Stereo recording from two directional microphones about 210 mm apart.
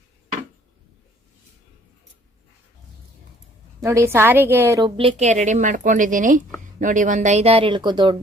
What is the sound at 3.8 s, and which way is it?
A woman's voice, 15° right (ahead or behind).